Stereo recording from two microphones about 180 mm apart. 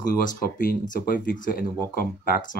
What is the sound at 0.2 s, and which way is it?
Speech, 50° left (ahead or behind).